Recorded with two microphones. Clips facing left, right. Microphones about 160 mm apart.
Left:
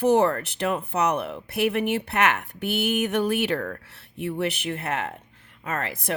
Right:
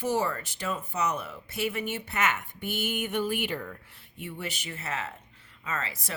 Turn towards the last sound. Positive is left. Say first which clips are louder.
# left 6 dB
turn(degrees=60)  # may be behind; listen again after turning